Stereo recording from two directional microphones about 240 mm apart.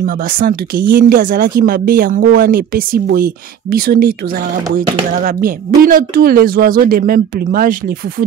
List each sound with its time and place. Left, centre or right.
0.0 s speech: right
5.9 s speech: right